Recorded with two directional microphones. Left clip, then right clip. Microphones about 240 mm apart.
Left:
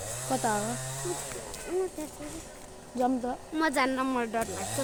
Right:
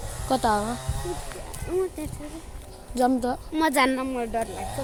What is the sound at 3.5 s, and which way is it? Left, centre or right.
Speech, right.